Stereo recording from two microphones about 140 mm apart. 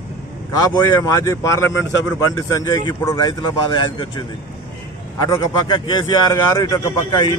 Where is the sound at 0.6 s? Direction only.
30° left (ahead or behind).